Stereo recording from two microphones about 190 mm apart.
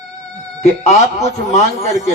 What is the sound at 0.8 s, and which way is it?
Speech, 35° left (ahead or behind).